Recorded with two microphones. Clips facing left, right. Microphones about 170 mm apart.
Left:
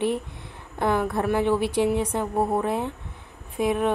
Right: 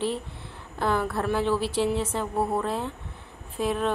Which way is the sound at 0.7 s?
15° left (ahead or behind).